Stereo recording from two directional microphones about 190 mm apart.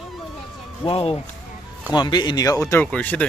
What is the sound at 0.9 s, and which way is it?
Speech, 30° left (ahead or behind).